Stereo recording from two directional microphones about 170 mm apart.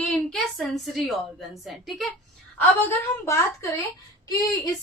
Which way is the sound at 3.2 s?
15° left (ahead or behind).